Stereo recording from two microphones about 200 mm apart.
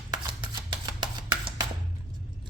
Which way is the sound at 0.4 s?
20° right (ahead or behind).